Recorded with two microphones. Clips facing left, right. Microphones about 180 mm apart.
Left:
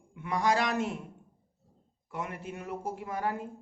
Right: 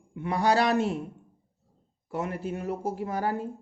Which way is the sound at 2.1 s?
35° right (ahead or behind).